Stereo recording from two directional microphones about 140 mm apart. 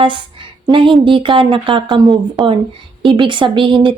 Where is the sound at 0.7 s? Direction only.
35° right (ahead or behind).